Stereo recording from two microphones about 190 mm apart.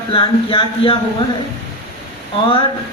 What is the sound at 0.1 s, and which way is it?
Speech, 25° left (ahead or behind).